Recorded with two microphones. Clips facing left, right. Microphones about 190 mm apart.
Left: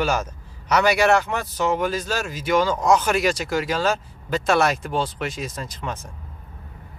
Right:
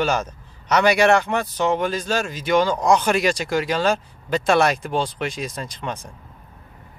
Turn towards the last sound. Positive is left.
turn(degrees=5)  # may be behind; listen again after turning